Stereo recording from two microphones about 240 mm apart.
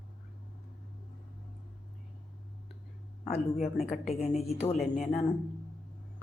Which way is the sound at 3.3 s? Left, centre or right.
Left.